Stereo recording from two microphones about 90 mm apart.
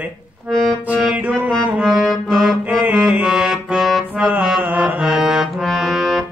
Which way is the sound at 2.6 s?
20° right (ahead or behind).